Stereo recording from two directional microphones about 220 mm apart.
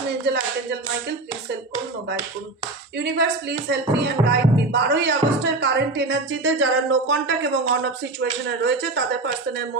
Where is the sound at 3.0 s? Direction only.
50° right (ahead or behind).